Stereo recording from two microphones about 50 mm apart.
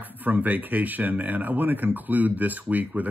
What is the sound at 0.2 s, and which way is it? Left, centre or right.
Speech, right.